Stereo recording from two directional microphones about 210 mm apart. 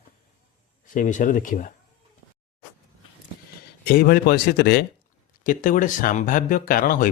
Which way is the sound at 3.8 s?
45° left (ahead or behind).